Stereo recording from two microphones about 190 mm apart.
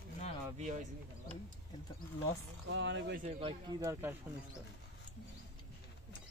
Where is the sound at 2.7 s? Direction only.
75° right (ahead or behind).